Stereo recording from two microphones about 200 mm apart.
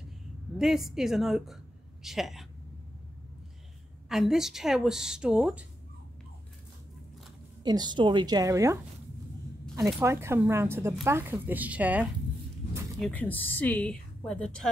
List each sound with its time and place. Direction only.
0.6 s speech: centre (ahead or behind)
4.1 s speech: centre (ahead or behind)
7.6 s a woman's voice: 20° right (ahead or behind)
9.9 s speech: 15° right (ahead or behind)
13.0 s speech: 10° left (ahead or behind)